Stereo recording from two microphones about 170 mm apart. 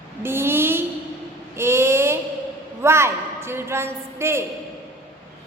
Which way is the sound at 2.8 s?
15° right (ahead or behind).